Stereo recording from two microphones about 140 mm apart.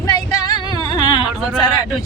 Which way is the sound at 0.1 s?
30° left (ahead or behind).